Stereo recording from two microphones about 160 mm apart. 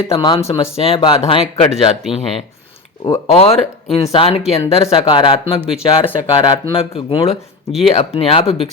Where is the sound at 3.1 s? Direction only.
40° left (ahead or behind).